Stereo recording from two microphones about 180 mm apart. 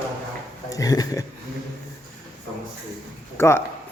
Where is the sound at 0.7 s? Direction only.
20° left (ahead or behind).